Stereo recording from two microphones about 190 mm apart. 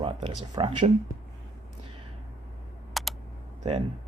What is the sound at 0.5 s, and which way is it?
Speech, 25° right (ahead or behind).